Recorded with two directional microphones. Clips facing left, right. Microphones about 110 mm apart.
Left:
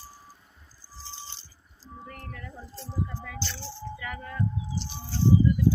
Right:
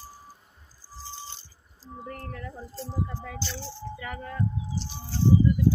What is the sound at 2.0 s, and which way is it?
Music, 35° right (ahead or behind).